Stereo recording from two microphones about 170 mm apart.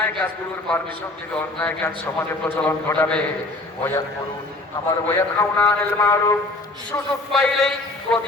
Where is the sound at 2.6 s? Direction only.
10° left (ahead or behind).